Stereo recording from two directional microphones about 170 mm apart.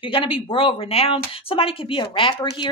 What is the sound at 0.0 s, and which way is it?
Speech, 30° left (ahead or behind).